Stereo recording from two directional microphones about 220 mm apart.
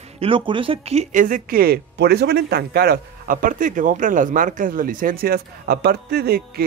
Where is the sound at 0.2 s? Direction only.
25° right (ahead or behind).